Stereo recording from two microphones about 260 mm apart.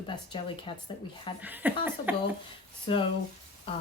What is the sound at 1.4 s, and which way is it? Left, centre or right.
Speech, centre.